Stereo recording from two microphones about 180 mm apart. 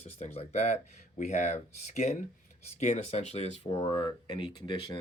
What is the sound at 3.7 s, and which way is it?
Speech, 25° left (ahead or behind).